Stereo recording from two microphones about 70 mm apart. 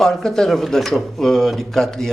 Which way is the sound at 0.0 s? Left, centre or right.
Centre.